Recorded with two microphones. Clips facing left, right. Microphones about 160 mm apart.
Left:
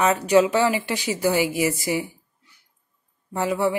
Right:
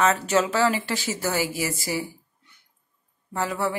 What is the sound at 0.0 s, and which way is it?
A woman's voice, 15° left (ahead or behind).